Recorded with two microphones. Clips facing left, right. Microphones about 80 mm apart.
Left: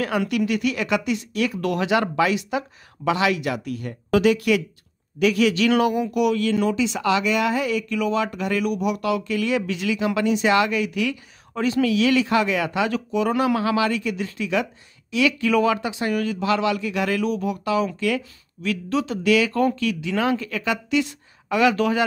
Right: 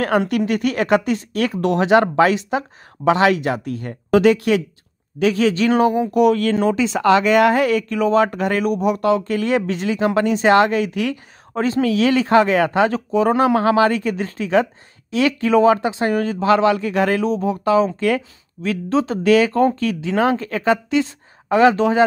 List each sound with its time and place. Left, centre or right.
0.1 s speech: right
1.6 s speech: right